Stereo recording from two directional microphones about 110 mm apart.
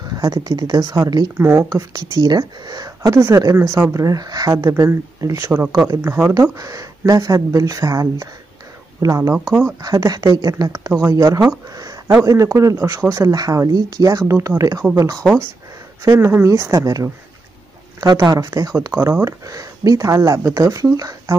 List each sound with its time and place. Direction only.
0.1 s speech: 35° right (ahead or behind)
1.4 s speech: 20° right (ahead or behind)
1.7 s speech: 35° right (ahead or behind)
9.5 s speech: 15° right (ahead or behind)
9.8 s speech: 35° right (ahead or behind)
11.2 s speech: 35° right (ahead or behind)
16.0 s speech: 25° right (ahead or behind)
18.9 s speech: 25° right (ahead or behind)